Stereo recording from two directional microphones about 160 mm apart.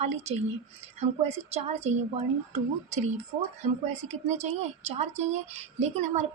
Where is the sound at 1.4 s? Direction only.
40° right (ahead or behind).